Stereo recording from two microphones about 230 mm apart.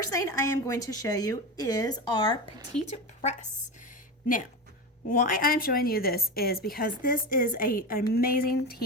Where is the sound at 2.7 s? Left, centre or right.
Left.